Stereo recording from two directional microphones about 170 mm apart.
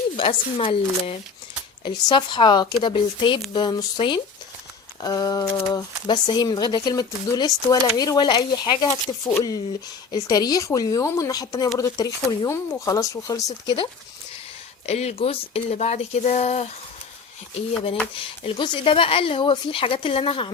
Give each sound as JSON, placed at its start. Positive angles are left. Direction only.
{"t": 0.2, "sound": "speech", "side_deg": 30}
{"t": 10.1, "sound": "speech", "side_deg": 20}
{"t": 14.8, "sound": "speech", "side_deg": 40}
{"t": 18.1, "sound": "speech", "side_deg": 30}